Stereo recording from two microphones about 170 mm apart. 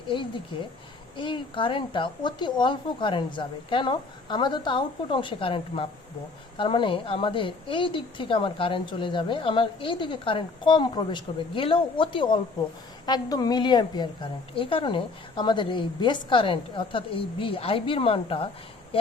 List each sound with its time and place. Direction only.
0.1 s a woman's voice: 30° left (ahead or behind)